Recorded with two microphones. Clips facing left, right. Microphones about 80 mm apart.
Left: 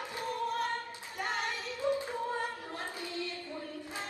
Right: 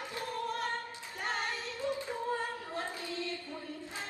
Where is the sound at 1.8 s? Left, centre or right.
Left.